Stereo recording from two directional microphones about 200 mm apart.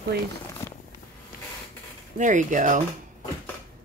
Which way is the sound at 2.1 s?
40° right (ahead or behind).